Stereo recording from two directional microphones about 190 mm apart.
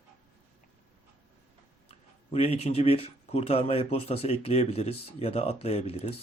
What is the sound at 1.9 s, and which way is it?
Speech, 35° left (ahead or behind).